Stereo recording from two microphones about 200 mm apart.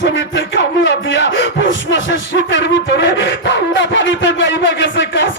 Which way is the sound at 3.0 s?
65° left (ahead or behind).